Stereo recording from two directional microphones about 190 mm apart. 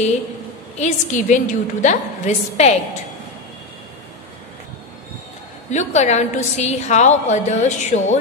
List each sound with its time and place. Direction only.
0.7 s a woman's voice: 40° left (ahead or behind)
5.7 s a woman's voice: 40° left (ahead or behind)